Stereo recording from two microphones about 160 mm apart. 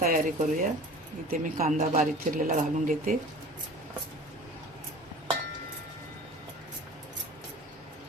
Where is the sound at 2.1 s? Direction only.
55° right (ahead or behind).